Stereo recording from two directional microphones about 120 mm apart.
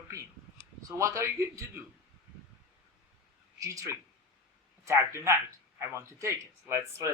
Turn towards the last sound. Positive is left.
turn(degrees=-25)  # may be behind; listen again after turning